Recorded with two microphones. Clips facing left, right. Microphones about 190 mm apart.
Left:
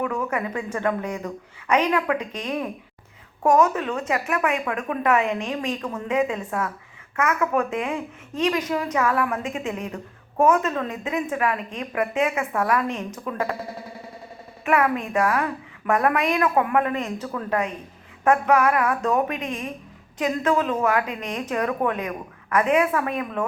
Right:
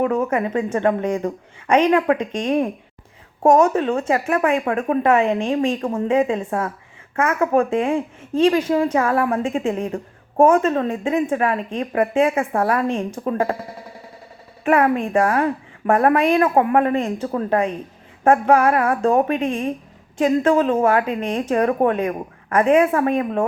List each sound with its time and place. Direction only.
0.2 s a woman's voice: 25° right (ahead or behind)
14.6 s a woman's voice: 35° right (ahead or behind)